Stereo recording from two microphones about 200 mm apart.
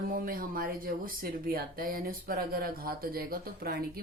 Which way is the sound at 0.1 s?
45° right (ahead or behind).